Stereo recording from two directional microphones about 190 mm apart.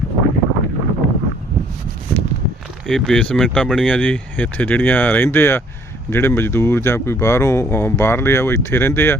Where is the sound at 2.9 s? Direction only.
Centre (ahead or behind).